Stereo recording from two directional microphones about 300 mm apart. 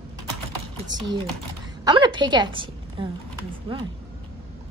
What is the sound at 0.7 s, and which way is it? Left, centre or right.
A woman's voice, centre.